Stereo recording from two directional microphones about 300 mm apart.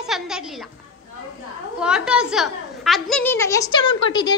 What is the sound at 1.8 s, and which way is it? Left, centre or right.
A woman's voice, centre.